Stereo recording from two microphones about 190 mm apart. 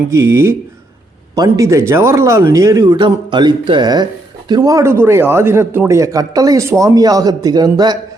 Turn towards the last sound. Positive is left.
turn(degrees=-20)  # may be behind; listen again after turning